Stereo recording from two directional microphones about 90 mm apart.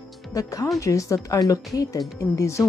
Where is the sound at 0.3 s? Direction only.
40° left (ahead or behind).